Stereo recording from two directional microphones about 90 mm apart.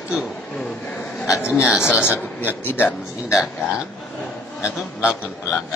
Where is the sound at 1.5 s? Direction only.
10° right (ahead or behind).